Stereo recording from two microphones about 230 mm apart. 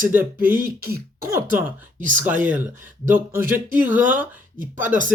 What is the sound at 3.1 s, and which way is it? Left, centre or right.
Speech, centre.